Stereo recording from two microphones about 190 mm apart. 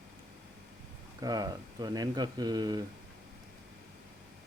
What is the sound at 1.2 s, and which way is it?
Speech, 20° right (ahead or behind).